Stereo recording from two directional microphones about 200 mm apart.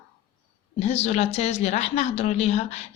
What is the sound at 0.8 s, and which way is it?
A woman's voice, 30° left (ahead or behind).